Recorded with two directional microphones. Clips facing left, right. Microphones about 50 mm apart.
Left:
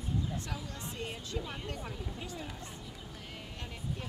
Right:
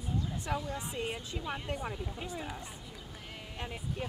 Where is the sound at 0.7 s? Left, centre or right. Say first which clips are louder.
Right 4 dB; centre.